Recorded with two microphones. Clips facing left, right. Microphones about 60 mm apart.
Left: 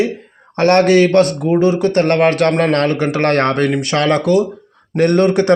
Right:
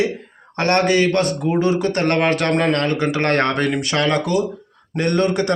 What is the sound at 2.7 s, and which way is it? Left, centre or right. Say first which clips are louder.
A man's voice: left 4 dB; left.